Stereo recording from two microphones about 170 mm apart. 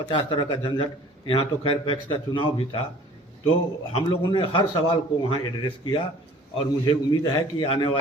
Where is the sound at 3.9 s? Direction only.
30° left (ahead or behind).